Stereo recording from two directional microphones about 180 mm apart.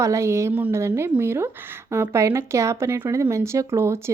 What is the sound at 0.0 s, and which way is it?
A woman's voice, 15° right (ahead or behind).